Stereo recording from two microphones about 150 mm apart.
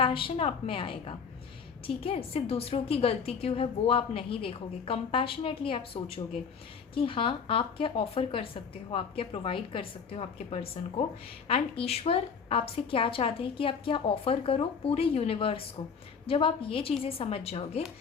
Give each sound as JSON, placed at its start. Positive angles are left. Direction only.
{"t": 0.0, "sound": "a woman's voice", "side_deg": 35}
{"t": 10.8, "sound": "speech", "side_deg": 55}
{"t": 11.4, "sound": "a woman's voice", "side_deg": 40}